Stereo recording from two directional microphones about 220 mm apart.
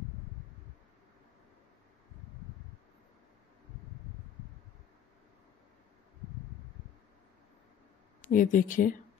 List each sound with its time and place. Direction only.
8.3 s speech: 40° left (ahead or behind)